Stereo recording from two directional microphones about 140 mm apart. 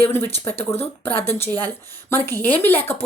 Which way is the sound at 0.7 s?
15° left (ahead or behind).